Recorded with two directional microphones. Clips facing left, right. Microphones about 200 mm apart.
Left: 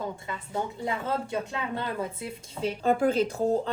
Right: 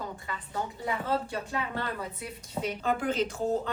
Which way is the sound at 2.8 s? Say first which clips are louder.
Left 6 dB; 35° left (ahead or behind).